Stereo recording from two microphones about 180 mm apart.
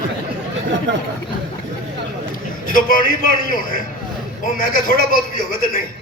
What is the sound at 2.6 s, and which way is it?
A man's voice, 50° left (ahead or behind).